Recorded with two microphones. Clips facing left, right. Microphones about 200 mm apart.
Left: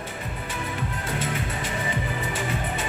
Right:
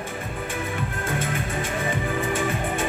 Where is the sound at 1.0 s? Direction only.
50° right (ahead or behind).